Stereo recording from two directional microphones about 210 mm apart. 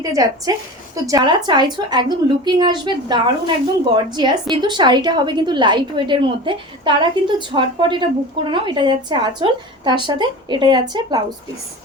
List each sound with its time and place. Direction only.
0.0 s a woman's voice: 15° right (ahead or behind)